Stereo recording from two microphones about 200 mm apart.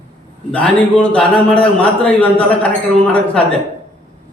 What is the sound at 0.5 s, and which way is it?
A man's voice, 5° left (ahead or behind).